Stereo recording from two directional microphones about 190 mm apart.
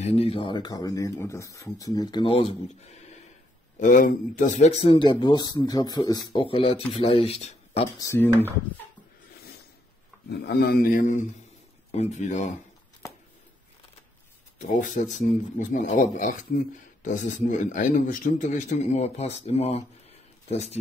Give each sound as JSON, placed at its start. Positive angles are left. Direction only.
{"t": 0.0, "sound": "speech", "side_deg": 30}
{"t": 8.0, "sound": "speech", "side_deg": 15}
{"t": 10.3, "sound": "a man's voice", "side_deg": 60}
{"t": 14.6, "sound": "a man's voice", "side_deg": 40}